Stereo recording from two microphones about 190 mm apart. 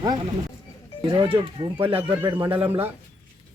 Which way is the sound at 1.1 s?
25° right (ahead or behind).